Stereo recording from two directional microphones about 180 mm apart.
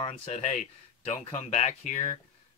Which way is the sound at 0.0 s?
35° left (ahead or behind).